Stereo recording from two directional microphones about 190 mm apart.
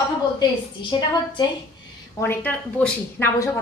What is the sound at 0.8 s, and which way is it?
Speech, 25° left (ahead or behind).